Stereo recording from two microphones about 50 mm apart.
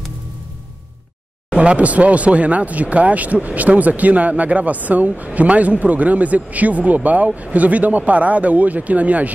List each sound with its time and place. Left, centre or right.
1.5 s speech: right